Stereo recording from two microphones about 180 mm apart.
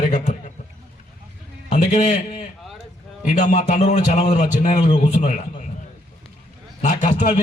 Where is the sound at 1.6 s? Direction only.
40° left (ahead or behind).